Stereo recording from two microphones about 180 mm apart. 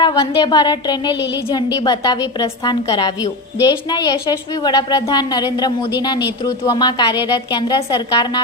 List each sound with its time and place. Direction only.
0.0 s a woman's voice: 25° left (ahead or behind)